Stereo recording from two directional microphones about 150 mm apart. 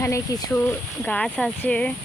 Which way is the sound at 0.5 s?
10° left (ahead or behind).